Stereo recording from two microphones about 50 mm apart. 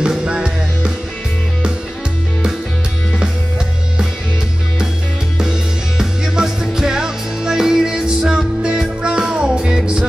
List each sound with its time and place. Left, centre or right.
0.0 s music: right
5.9 s music: centre